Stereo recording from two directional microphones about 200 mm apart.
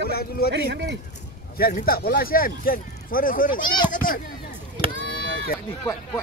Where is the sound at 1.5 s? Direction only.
50° left (ahead or behind).